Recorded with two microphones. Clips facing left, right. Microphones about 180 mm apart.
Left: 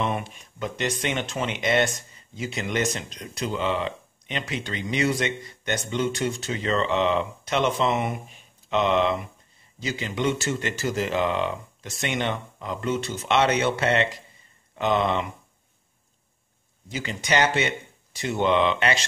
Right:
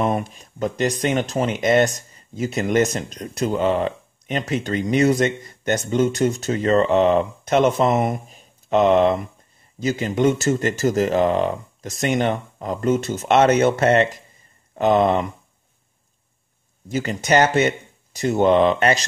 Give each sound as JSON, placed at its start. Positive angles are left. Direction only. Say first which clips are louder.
{"t": 0.0, "sound": "speech", "louder": "right 6 dB", "side_deg": -40}
{"t": 16.9, "sound": "speech", "louder": "right 7 dB", "side_deg": -45}